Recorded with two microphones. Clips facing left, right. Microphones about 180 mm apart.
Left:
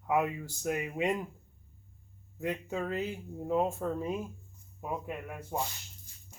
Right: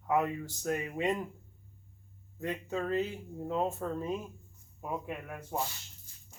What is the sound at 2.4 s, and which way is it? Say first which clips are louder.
Speech: left 1 dB; 10° left (ahead or behind).